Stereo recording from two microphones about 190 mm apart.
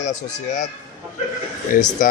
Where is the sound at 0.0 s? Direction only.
40° left (ahead or behind).